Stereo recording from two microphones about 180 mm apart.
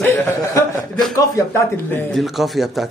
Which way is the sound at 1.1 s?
15° left (ahead or behind).